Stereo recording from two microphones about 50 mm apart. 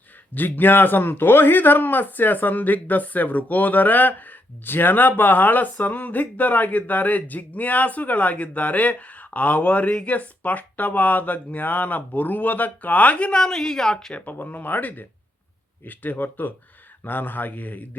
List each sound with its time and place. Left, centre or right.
0.3 s a man's voice: left
13.4 s speech: centre
14.1 s a man's voice: left